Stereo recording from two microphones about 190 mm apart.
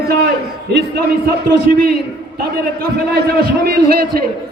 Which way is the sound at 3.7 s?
50° right (ahead or behind).